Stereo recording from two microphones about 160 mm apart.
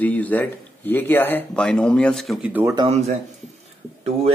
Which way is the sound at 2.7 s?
40° right (ahead or behind).